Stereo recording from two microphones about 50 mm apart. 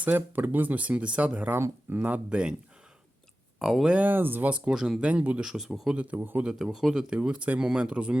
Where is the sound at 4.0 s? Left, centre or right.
Right.